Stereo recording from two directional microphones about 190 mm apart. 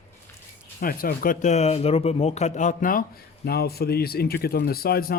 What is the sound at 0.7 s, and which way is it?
Speech, 50° left (ahead or behind).